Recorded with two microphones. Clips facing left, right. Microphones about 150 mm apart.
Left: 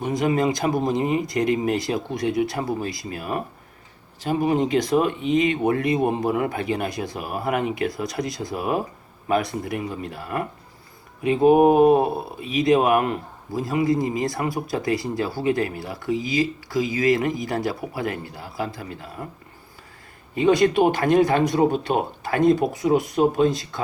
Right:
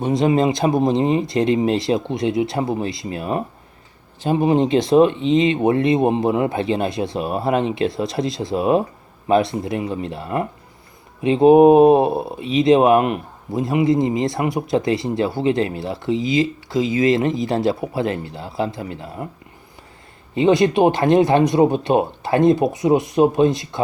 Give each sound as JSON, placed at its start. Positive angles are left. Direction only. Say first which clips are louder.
{"t": 0.0, "sound": "speech", "louder": "right 4 dB", "side_deg": -25}
{"t": 20.3, "sound": "speech", "louder": "right 2 dB", "side_deg": -20}